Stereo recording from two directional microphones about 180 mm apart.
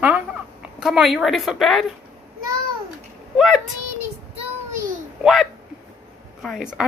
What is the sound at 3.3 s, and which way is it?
Speech, centre (ahead or behind).